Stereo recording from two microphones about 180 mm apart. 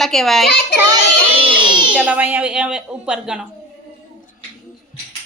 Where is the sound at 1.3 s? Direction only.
30° right (ahead or behind).